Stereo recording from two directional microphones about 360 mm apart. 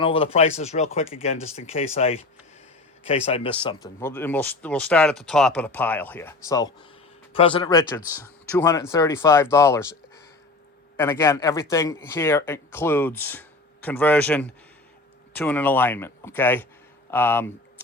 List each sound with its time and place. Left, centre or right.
0.0 s speech: centre
10.9 s speech: centre